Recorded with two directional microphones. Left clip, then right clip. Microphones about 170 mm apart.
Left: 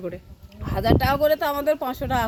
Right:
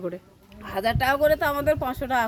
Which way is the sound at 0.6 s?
5° left (ahead or behind).